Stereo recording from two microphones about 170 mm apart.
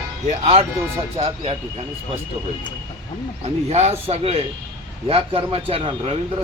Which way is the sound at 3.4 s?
40° right (ahead or behind).